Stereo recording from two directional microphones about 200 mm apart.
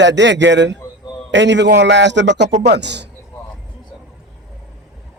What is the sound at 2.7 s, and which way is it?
Speech, 60° right (ahead or behind).